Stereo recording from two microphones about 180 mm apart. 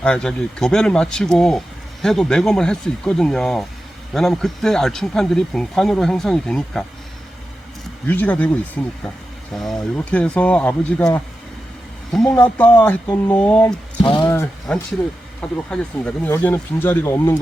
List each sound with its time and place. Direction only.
0.0 s speech: 5° left (ahead or behind)
8.0 s speech: 10° left (ahead or behind)
14.0 s speech: 25° left (ahead or behind)
14.3 s a sound: 15° left (ahead or behind)
15.4 s speech: 5° left (ahead or behind)